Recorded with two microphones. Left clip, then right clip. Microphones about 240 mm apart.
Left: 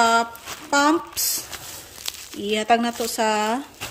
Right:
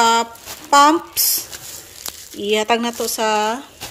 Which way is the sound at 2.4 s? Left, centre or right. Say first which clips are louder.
Right 3 dB; centre.